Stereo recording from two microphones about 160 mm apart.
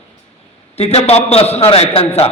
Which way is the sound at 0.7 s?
40° left (ahead or behind).